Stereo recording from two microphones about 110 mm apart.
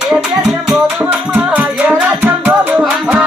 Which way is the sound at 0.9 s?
15° right (ahead or behind).